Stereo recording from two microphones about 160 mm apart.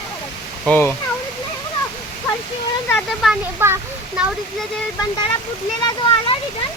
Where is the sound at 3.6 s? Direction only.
15° right (ahead or behind).